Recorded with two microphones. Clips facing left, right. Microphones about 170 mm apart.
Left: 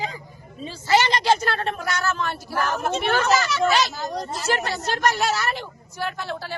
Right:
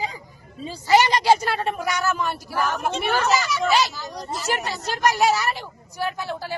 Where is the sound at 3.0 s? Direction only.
5° right (ahead or behind).